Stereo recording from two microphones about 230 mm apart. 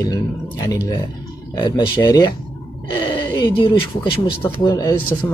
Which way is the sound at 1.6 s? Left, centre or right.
Centre.